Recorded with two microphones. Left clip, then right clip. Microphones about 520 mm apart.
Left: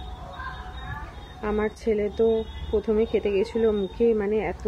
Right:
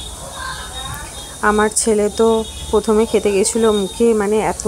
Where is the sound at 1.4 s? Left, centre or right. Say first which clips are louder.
Right 12 dB; left.